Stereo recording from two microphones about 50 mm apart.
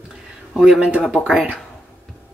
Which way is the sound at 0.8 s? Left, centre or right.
Centre.